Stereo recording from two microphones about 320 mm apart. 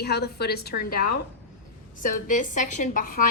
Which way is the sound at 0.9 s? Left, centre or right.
Left.